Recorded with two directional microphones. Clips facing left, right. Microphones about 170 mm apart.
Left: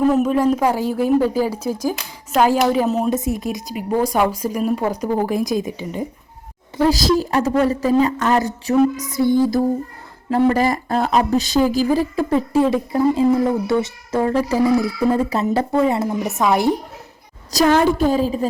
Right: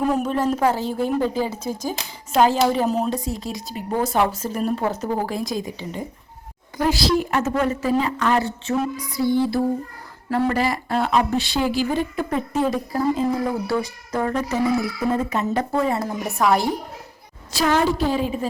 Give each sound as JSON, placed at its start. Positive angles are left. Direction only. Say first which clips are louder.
{"t": 0.1, "sound": "a woman's voice", "louder": "left 5 dB", "side_deg": 5}
{"t": 3.1, "sound": "a woman's voice", "louder": "left 5 dB", "side_deg": 20}
{"t": 6.9, "sound": "a woman's voice", "louder": "left 3 dB", "side_deg": 35}
{"t": 10.2, "sound": "speech", "louder": "left 5 dB", "side_deg": 25}
{"t": 10.5, "sound": "a woman's voice", "louder": "left 4 dB", "side_deg": 45}
{"t": 15.7, "sound": "speech", "louder": "left 5 dB", "side_deg": 20}
{"t": 17.5, "sound": "a woman's voice", "louder": "left 5 dB", "side_deg": 45}